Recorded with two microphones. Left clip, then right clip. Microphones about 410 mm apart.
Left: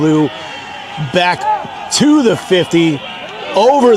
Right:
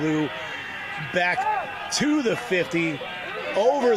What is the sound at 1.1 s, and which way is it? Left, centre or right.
Speech, left.